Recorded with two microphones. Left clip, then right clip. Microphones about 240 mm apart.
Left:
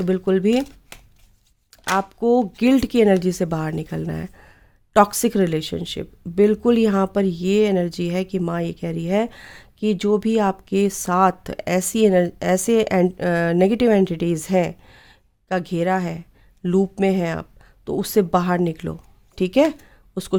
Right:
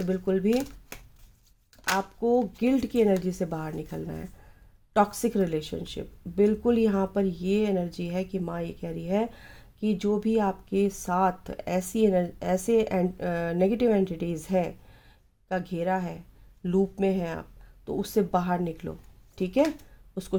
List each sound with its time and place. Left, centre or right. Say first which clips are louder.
0.0 s speech: left 8 dB; left
2.0 s speech: left 7 dB; left